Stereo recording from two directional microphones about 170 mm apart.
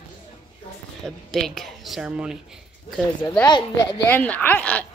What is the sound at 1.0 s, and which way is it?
Speech, centre (ahead or behind).